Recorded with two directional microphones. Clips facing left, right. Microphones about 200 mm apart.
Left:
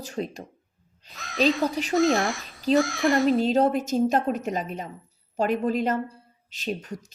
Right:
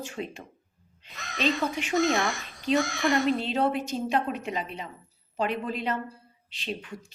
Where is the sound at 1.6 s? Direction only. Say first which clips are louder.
Left 4 dB; 35° left (ahead or behind).